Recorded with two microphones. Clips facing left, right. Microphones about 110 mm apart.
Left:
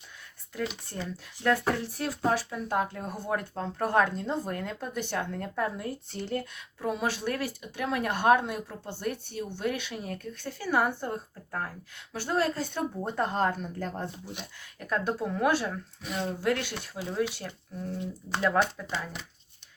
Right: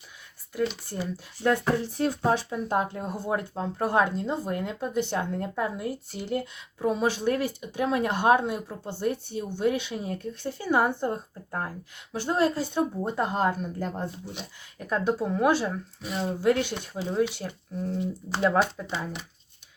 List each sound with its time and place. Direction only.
0.9 s speech: 10° right (ahead or behind)
16.0 s speech: centre (ahead or behind)
16.4 s speech: 15° right (ahead or behind)
18.6 s speech: 10° right (ahead or behind)